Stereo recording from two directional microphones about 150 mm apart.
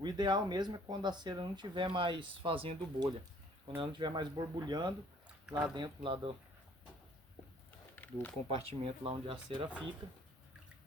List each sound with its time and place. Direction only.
0.0 s speech: 30° right (ahead or behind)
5.5 s speech: 5° right (ahead or behind)
5.7 s speech: 30° right (ahead or behind)
7.9 s a sound: 10° left (ahead or behind)
8.4 s speech: 40° right (ahead or behind)